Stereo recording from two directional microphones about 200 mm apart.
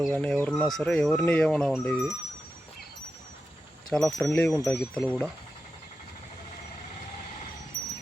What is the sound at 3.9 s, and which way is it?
Speech, centre (ahead or behind).